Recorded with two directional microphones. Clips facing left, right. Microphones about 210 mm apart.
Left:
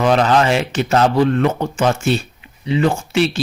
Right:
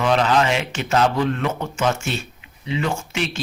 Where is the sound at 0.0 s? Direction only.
45° left (ahead or behind).